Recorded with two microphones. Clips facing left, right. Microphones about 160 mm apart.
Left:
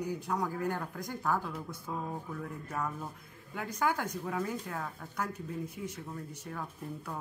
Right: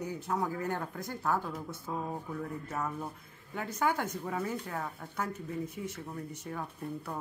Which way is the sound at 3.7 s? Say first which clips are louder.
Right 1 dB; 10° left (ahead or behind).